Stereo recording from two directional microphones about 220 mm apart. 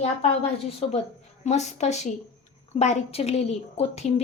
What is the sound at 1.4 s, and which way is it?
A woman's voice, 30° left (ahead or behind).